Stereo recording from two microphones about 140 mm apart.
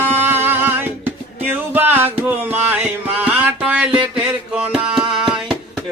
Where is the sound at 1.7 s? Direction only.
15° right (ahead or behind).